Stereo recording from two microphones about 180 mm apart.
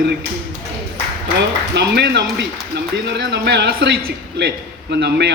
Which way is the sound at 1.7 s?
70° right (ahead or behind).